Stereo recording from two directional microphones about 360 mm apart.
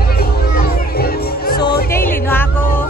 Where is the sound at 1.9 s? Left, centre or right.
Centre.